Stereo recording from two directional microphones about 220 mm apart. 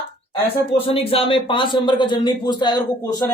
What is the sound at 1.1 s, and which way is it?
A man's voice, 25° left (ahead or behind).